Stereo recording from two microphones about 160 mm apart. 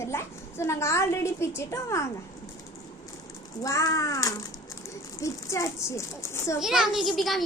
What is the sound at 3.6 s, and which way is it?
Speech, 20° left (ahead or behind).